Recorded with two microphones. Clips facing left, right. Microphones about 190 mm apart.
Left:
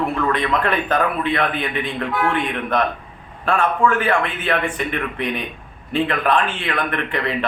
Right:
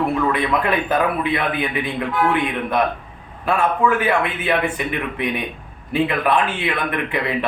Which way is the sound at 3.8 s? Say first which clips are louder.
Even; 10° right (ahead or behind).